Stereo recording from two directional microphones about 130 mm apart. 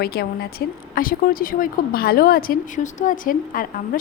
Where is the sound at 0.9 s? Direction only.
90° left.